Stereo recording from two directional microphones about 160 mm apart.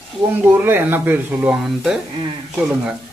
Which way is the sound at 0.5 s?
15° right (ahead or behind).